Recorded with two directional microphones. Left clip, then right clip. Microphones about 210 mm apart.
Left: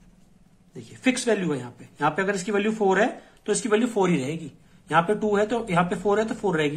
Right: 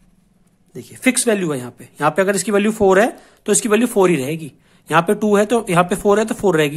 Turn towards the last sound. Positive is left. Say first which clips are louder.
# right 8 dB
turn(degrees=-50)  # may be behind; listen again after turning